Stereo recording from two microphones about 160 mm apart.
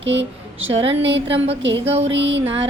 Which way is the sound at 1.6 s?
90° right.